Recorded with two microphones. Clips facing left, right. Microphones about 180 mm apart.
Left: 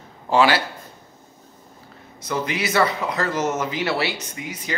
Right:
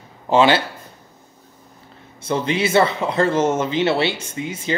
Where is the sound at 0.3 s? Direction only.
20° right (ahead or behind).